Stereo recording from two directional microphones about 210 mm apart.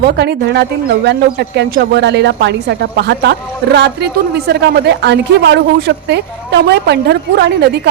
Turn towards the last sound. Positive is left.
turn(degrees=-55)  # may be behind; listen again after turning